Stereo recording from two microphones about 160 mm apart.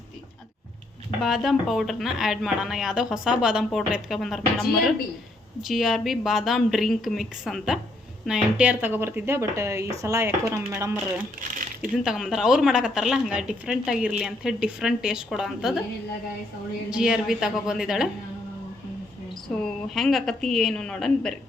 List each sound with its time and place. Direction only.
1.2 s speech: centre (ahead or behind)
5.6 s speech: centre (ahead or behind)
12.0 s speech: 5° right (ahead or behind)
16.9 s speech: 5° right (ahead or behind)
19.6 s speech: centre (ahead or behind)